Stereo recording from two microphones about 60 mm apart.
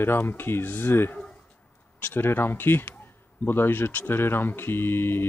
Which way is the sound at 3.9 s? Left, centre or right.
Left.